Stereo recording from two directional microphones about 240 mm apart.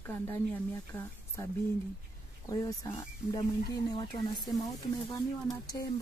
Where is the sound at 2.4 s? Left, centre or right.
Centre.